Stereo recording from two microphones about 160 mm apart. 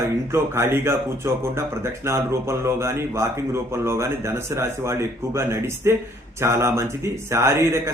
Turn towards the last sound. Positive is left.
turn(degrees=-15)  # may be behind; listen again after turning